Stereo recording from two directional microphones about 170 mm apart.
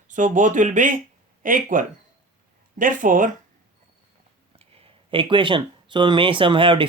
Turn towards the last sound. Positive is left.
turn(degrees=-30)  # may be behind; listen again after turning